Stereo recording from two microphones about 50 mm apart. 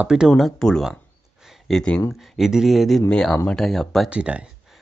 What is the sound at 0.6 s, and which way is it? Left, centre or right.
Speech, centre.